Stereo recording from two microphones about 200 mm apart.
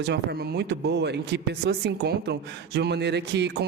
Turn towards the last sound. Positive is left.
turn(degrees=-60)  # may be behind; listen again after turning